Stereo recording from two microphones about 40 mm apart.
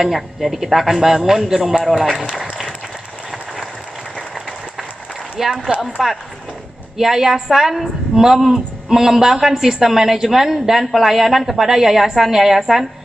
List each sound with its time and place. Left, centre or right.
0.0 s a woman's voice: centre
5.5 s speech: centre
5.8 s a woman's voice: centre